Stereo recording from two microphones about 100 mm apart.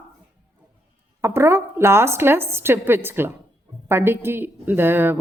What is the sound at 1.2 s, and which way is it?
Speech, 25° right (ahead or behind).